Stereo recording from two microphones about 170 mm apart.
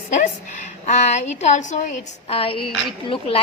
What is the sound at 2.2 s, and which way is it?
Speech, 35° left (ahead or behind).